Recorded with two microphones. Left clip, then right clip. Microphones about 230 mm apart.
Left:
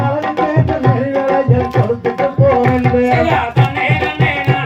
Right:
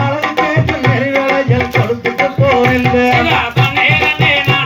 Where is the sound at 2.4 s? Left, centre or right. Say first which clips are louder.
Right 1 dB; right.